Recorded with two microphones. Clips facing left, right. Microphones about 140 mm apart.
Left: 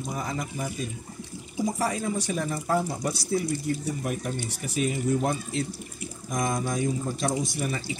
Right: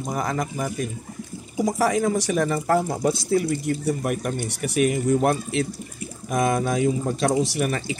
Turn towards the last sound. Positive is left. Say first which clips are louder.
# right 6 dB
turn(degrees=-70)  # may be behind; listen again after turning